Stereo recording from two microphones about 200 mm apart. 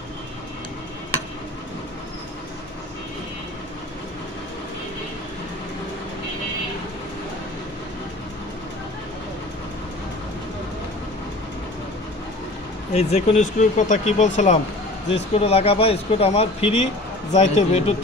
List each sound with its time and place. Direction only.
12.9 s speech: 35° left (ahead or behind)